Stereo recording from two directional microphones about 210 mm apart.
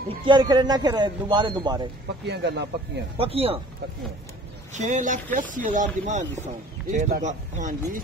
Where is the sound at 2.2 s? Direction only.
55° right (ahead or behind).